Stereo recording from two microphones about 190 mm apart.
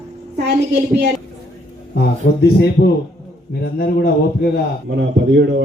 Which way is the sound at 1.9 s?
60° left (ahead or behind).